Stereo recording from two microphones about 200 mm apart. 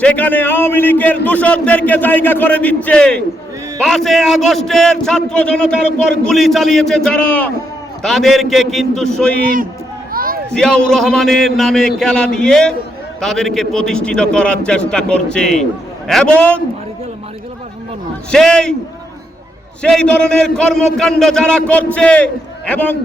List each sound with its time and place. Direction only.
0.0 s a man's voice: 5° left (ahead or behind)
9.4 s a man's voice: 45° right (ahead or behind)
10.1 s a sound: 45° right (ahead or behind)
10.5 s a man's voice: 5° left (ahead or behind)
18.3 s a man's voice: 5° left (ahead or behind)
19.8 s a man's voice: 5° left (ahead or behind)